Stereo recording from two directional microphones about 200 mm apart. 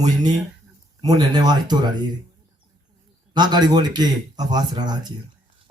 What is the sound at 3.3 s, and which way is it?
Speech, 20° right (ahead or behind).